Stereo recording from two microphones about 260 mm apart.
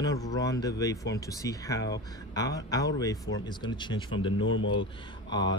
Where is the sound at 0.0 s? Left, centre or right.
Centre.